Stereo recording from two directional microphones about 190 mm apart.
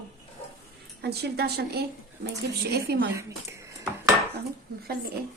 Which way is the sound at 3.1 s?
15° right (ahead or behind).